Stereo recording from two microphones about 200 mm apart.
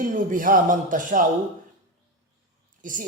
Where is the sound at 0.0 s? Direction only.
40° right (ahead or behind).